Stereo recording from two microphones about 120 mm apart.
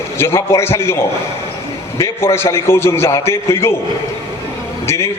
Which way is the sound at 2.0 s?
20° left (ahead or behind).